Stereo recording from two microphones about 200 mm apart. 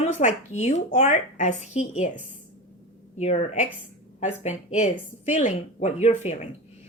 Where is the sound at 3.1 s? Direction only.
35° left (ahead or behind).